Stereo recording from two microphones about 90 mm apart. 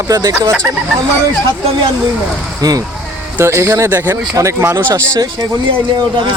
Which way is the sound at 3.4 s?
30° right (ahead or behind).